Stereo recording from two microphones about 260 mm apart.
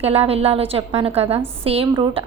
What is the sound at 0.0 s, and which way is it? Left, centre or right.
A woman's voice, right.